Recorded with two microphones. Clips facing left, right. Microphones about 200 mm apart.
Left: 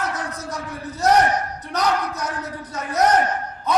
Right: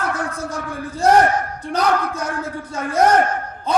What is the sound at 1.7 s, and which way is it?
A man's voice, 30° right (ahead or behind).